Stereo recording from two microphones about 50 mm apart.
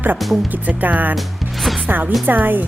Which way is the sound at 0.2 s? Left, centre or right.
Centre.